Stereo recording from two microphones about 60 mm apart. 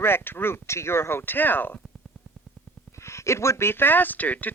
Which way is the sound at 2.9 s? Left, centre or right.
Left.